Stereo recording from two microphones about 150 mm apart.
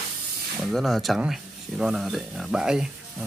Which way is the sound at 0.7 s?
Centre (ahead or behind).